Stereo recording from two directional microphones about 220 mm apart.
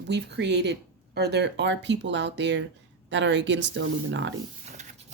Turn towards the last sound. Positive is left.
turn(degrees=-30)  # may be behind; listen again after turning